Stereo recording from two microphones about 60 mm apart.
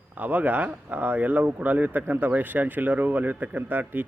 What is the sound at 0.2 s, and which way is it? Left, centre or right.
Speech, right.